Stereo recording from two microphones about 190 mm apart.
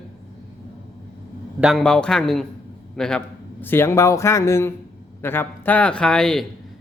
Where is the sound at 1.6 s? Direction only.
Centre (ahead or behind).